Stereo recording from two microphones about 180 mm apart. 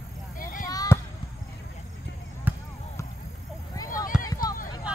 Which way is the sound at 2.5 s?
10° right (ahead or behind).